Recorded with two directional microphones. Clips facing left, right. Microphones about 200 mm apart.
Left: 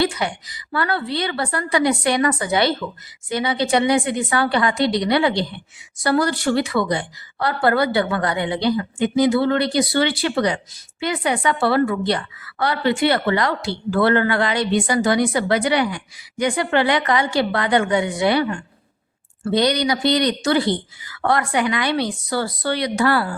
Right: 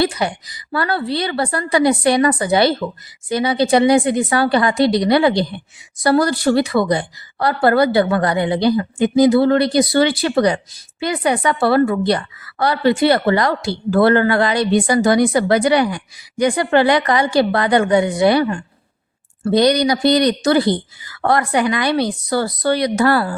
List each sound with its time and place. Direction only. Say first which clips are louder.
0.0 s a woman's voice: right 3 dB; 35° right (ahead or behind)